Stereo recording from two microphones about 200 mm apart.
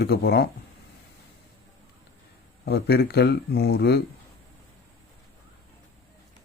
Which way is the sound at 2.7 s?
50° left (ahead or behind).